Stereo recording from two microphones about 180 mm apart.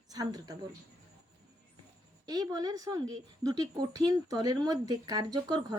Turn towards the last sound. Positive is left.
turn(degrees=-20)  # may be behind; listen again after turning